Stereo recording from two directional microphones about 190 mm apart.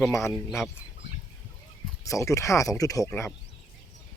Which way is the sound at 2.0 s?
15° left (ahead or behind).